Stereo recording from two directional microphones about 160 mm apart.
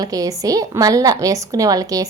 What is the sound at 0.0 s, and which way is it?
A woman's voice, 20° right (ahead or behind).